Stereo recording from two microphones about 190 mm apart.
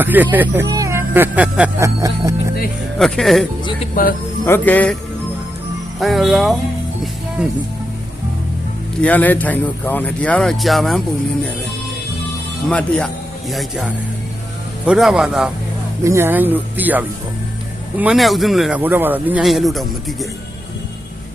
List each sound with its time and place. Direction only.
0.0 s speech: 10° right (ahead or behind)
2.0 s speech: 20° right (ahead or behind)
3.0 s speech: centre (ahead or behind)
4.0 s speech: 45° left (ahead or behind)
4.4 s speech: 10° left (ahead or behind)
6.0 s speech: centre (ahead or behind)
9.0 s speech: 10° left (ahead or behind)
12.6 s speech: 5° left (ahead or behind)